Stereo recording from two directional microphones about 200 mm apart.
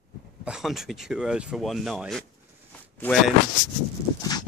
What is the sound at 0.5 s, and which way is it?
Speech, centre (ahead or behind).